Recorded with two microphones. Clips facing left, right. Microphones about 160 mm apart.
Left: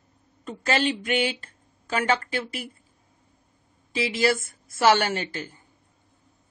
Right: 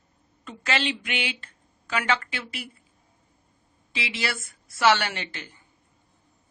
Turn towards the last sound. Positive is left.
turn(degrees=45)  # may be behind; listen again after turning